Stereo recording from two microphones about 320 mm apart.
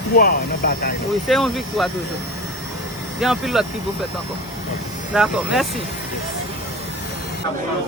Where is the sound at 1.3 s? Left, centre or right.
Centre.